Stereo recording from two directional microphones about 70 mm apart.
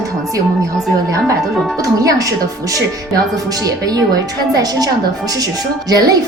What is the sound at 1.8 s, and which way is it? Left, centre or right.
Speech, right.